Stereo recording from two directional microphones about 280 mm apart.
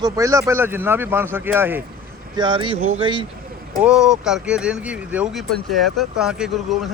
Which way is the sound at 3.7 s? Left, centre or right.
Centre.